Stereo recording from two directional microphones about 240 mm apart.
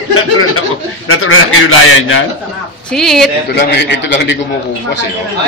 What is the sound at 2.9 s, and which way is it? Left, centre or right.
Speech, centre.